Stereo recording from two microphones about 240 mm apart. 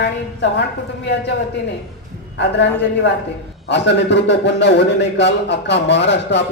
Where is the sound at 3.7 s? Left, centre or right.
Left.